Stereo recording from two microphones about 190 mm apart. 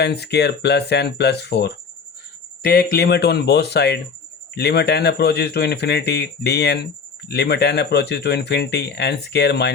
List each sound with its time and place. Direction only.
0.0 s speech: 60° left (ahead or behind)